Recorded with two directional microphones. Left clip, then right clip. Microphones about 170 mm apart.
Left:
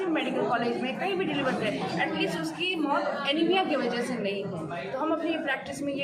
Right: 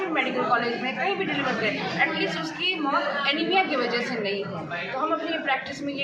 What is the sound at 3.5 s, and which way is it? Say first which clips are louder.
Speech: right 3 dB; 45° left (ahead or behind).